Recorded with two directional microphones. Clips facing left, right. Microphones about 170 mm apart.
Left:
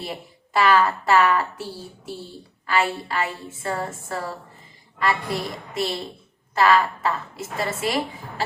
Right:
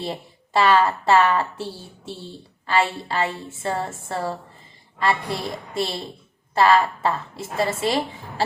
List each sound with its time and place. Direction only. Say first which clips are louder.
0.0 s a woman's voice: right 3 dB; 25° right (ahead or behind)